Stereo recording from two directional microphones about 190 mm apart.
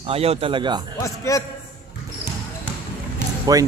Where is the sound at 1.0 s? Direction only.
15° left (ahead or behind).